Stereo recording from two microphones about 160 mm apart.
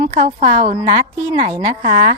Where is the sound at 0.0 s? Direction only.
40° right (ahead or behind).